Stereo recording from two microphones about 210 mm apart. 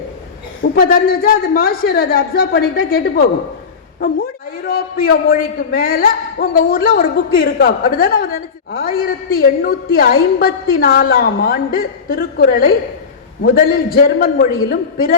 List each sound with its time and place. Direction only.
0.6 s a man's voice: 45° left (ahead or behind)